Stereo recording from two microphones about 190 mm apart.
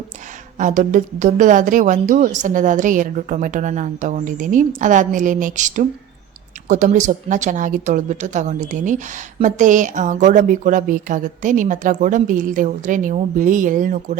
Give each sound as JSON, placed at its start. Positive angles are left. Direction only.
{"t": 0.6, "sound": "speech", "side_deg": -40}